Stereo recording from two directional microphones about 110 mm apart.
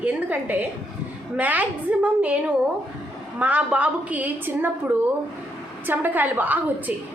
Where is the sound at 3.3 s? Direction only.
15° right (ahead or behind).